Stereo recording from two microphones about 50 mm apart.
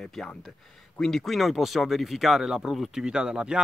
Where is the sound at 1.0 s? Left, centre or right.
Centre.